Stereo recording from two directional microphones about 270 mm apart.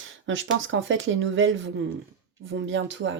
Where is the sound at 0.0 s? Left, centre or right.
Right.